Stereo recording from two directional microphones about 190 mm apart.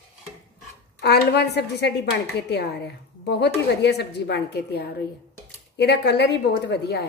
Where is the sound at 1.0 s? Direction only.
60° left (ahead or behind).